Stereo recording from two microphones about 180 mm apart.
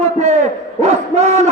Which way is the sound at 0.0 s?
40° right (ahead or behind).